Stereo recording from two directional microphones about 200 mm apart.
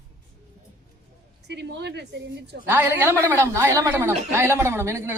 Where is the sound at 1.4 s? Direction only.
60° right (ahead or behind).